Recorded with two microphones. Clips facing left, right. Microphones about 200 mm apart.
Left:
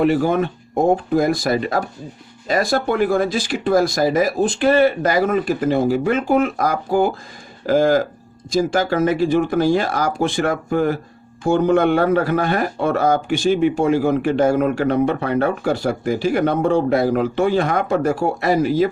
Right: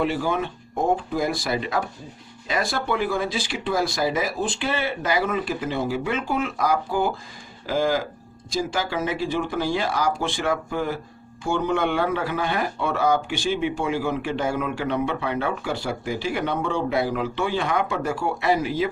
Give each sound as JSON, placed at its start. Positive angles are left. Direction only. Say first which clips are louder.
{"t": 0.0, "sound": "speech", "louder": "left 7 dB", "side_deg": 50}